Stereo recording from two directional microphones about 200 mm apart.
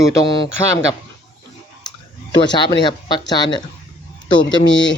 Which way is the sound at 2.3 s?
20° left (ahead or behind).